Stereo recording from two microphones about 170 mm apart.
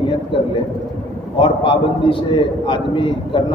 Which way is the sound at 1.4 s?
30° left (ahead or behind).